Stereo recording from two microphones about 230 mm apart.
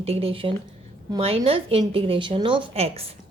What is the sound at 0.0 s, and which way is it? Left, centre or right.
A woman's voice, right.